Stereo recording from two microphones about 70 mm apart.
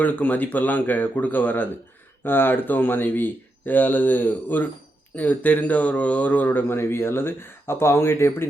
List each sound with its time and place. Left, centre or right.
0.0 s speech: left